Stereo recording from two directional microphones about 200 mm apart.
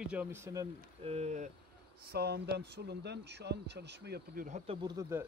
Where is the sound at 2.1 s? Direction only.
55° right (ahead or behind).